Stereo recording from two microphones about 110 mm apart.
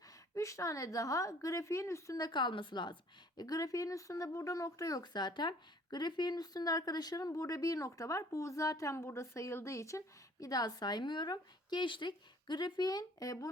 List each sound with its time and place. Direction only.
0.3 s a woman's voice: 30° left (ahead or behind)